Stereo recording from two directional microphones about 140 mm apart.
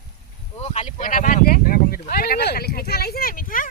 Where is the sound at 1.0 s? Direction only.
75° left (ahead or behind).